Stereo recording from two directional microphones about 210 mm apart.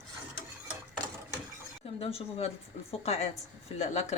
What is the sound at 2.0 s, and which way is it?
Speech, 25° left (ahead or behind).